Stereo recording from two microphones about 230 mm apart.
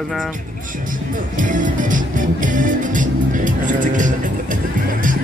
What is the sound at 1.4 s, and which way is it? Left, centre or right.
Music, right.